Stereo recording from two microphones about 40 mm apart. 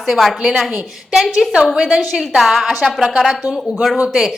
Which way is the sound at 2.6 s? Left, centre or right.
Centre.